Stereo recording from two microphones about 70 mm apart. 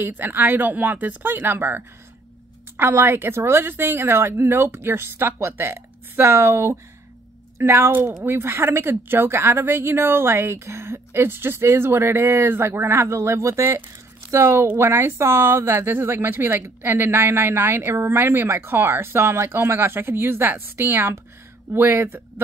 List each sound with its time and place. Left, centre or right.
0.0 s speech: right
2.8 s a woman's voice: right